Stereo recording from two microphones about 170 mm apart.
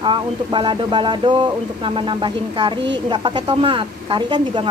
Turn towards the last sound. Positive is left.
turn(degrees=-30)  # may be behind; listen again after turning